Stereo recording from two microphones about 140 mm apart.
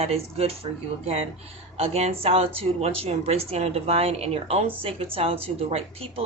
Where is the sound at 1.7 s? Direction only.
45° right (ahead or behind).